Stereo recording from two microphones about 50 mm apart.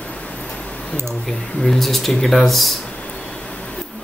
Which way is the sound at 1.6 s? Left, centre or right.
Centre.